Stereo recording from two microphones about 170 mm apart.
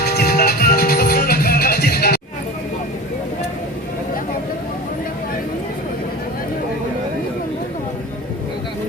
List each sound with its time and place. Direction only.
0.0 s music: 70° left (ahead or behind)